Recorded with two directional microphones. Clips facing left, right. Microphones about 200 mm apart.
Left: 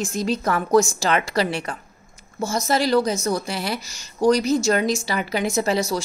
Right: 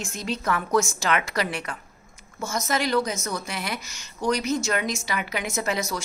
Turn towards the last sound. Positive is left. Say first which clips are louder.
# left 6 dB
turn(degrees=30)  # may be behind; listen again after turning